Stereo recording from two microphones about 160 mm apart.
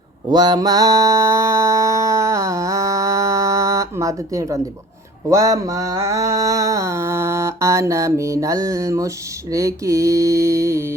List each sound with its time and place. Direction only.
0.3 s mantra: 25° right (ahead or behind)